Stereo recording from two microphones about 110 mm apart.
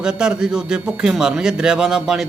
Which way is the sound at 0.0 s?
5° right (ahead or behind).